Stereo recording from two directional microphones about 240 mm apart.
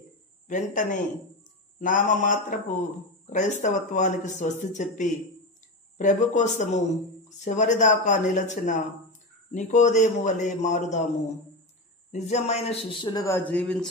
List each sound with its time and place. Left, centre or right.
0.5 s a man's voice: left
12.1 s a man's voice: left; by 13.8 s centre